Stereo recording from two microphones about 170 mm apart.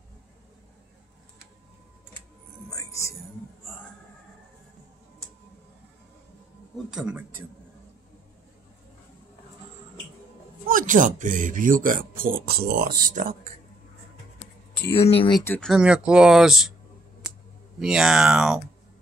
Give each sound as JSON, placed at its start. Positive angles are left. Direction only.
{"t": 2.7, "sound": "music", "side_deg": 15}
{"t": 6.9, "sound": "a man's voice", "side_deg": -5}
{"t": 10.7, "sound": "speech", "side_deg": -50}
{"t": 15.0, "sound": "speech", "side_deg": 35}
{"t": 15.4, "sound": "speech", "side_deg": 10}
{"t": 15.7, "sound": "speech", "side_deg": -5}
{"t": 17.7, "sound": "speech", "side_deg": -5}